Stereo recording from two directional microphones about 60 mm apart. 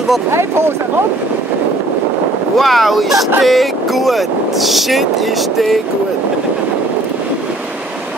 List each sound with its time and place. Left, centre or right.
0.3 s speech: right
2.5 s speech: centre